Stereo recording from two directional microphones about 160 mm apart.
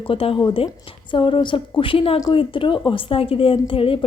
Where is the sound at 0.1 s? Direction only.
35° left (ahead or behind).